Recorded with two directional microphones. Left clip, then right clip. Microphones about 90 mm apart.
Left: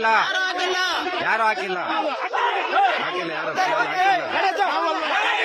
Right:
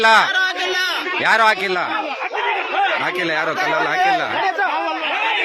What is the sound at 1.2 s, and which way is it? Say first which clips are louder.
Speech: right 8 dB; 50° right (ahead or behind).